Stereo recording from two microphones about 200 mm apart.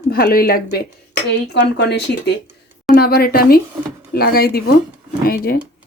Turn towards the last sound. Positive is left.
turn(degrees=50)  # may be behind; listen again after turning